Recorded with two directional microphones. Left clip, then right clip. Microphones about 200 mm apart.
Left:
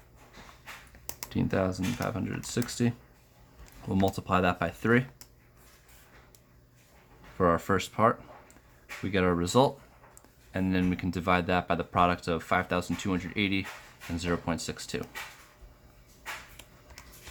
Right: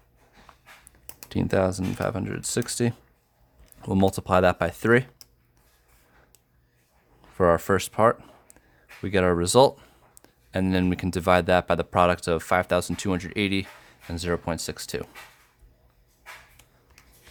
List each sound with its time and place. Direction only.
1.3 s speech: 50° right (ahead or behind)
4.0 s speech: 50° right (ahead or behind)
7.3 s speech: 50° right (ahead or behind)